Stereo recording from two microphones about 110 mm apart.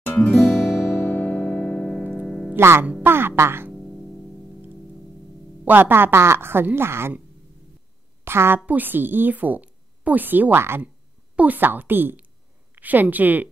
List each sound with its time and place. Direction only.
0.3 s music: centre (ahead or behind)
0.8 s music: 25° left (ahead or behind); by 2.5 s 5° left (ahead or behind)
2.5 s a woman's voice: 25° right (ahead or behind)
3.7 s music: 10° left (ahead or behind)
5.7 s a woman's voice: 20° right (ahead or behind)
8.2 s a woman's voice: 20° right (ahead or behind)